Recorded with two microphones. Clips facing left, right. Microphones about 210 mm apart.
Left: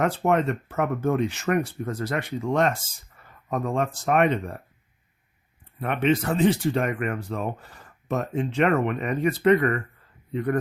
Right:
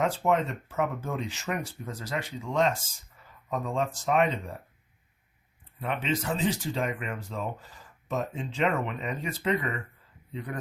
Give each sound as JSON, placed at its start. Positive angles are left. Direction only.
{"t": 0.0, "sound": "speech", "side_deg": 60}
{"t": 5.8, "sound": "speech", "side_deg": 60}